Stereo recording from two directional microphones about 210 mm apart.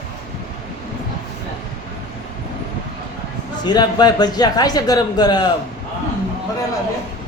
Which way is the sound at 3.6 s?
20° left (ahead or behind).